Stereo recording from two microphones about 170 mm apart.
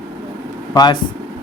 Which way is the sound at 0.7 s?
25° left (ahead or behind).